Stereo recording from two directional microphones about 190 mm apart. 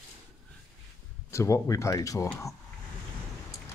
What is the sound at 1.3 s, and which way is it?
Speech, 15° left (ahead or behind).